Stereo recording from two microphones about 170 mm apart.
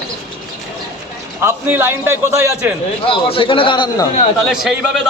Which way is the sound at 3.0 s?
30° left (ahead or behind).